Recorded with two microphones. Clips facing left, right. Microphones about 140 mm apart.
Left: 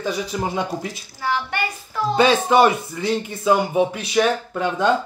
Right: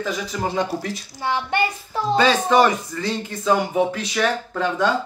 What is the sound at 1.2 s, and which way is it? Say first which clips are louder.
Child singing: right 1 dB; 20° right (ahead or behind).